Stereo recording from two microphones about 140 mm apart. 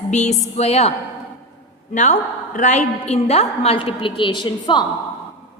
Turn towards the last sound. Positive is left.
turn(degrees=30)  # may be behind; listen again after turning